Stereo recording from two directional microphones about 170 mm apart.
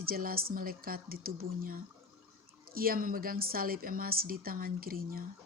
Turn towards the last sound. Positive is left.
turn(degrees=-60)  # may be behind; listen again after turning